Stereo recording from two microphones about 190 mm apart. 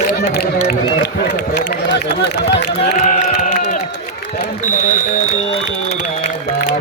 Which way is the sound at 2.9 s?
40° left (ahead or behind).